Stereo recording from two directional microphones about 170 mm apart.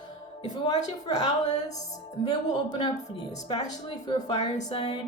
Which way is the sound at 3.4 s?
25° left (ahead or behind).